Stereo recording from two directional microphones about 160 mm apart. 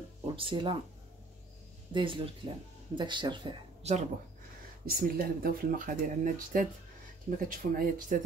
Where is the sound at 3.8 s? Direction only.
45° right (ahead or behind).